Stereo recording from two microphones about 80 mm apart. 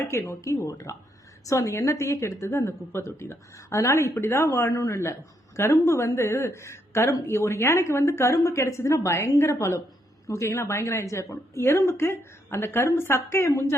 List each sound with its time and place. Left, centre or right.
0.0 s a woman's voice: left